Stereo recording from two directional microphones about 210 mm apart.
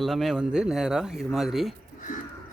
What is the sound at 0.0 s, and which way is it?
Speech, centre (ahead or behind).